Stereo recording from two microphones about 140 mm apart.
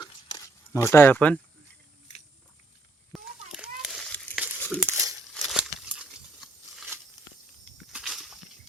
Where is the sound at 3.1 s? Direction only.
5° right (ahead or behind).